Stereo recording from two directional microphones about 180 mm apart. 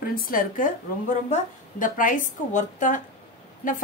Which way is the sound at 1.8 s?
50° left (ahead or behind).